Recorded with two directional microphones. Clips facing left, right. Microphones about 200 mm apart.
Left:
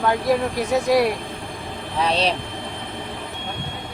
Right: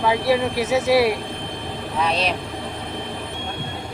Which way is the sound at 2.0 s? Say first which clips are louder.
Left 2 dB; 30° left (ahead or behind).